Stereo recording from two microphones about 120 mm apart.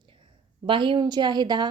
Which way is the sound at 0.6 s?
45° right (ahead or behind).